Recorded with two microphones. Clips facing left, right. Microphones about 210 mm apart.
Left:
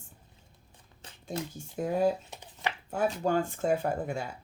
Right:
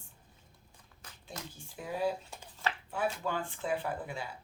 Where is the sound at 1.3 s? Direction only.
45° left (ahead or behind).